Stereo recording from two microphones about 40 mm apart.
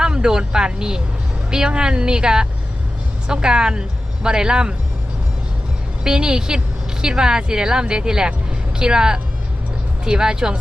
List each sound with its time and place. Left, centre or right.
0.0 s speech: right
6.1 s speech: centre